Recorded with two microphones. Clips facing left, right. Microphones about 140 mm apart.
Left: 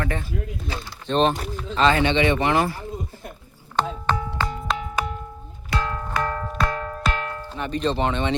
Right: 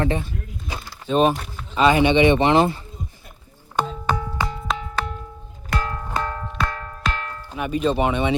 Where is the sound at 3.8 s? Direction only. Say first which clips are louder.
Even; 10° right (ahead or behind).